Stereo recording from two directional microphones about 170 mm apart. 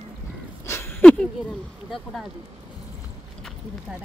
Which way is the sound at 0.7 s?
15° left (ahead or behind).